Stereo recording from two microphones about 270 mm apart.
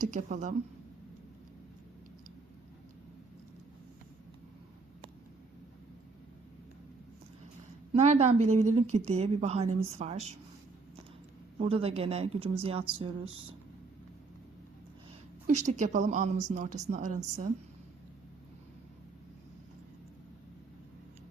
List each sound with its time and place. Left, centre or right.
0.0 s speech: right
7.9 s speech: right
11.5 s speech: right
15.4 s speech: right